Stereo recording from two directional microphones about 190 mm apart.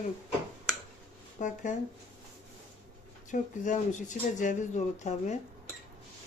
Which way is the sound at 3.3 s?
40° left (ahead or behind).